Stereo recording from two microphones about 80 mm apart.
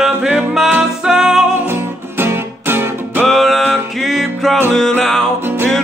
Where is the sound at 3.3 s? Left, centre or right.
Centre.